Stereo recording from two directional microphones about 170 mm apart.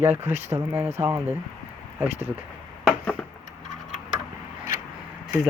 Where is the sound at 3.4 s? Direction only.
45° left (ahead or behind).